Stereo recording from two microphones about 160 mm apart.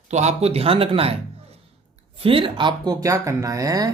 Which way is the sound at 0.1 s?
45° right (ahead or behind).